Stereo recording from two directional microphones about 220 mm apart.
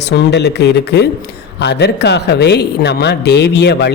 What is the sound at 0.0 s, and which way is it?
A man's voice, 50° left (ahead or behind).